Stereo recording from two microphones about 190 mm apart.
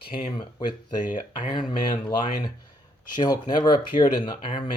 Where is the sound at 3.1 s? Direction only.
20° left (ahead or behind).